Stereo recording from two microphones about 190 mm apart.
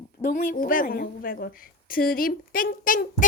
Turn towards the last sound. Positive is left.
turn(degrees=45)  # may be behind; listen again after turning